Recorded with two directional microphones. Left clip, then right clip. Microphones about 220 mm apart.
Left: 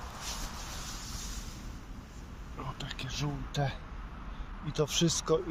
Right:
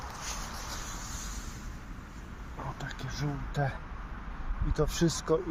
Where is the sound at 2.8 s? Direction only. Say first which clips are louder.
Even; centre (ahead or behind).